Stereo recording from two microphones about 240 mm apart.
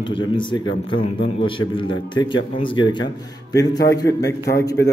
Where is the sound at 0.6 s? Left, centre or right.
Left.